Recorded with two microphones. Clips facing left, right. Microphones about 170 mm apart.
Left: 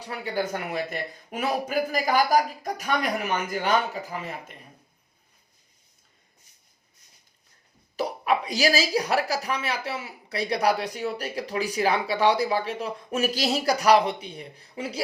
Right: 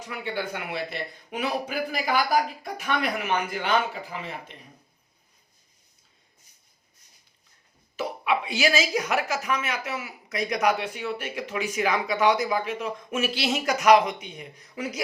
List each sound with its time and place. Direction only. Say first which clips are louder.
0.0 s speech: left 2 dB; 35° left (ahead or behind)
7.9 s speech: left 1 dB; 40° left (ahead or behind)